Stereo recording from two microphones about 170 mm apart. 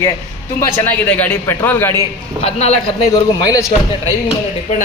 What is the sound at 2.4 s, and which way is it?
Speech, 40° left (ahead or behind).